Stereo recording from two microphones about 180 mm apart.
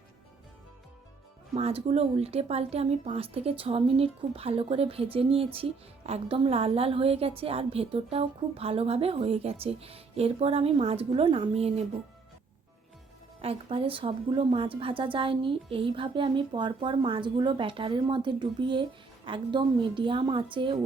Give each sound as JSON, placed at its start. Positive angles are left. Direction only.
{"t": 1.5, "sound": "a woman's voice", "side_deg": -35}
{"t": 13.4, "sound": "a woman's voice", "side_deg": -30}